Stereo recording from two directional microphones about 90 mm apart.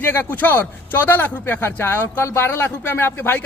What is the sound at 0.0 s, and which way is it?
A man's voice, 25° left (ahead or behind).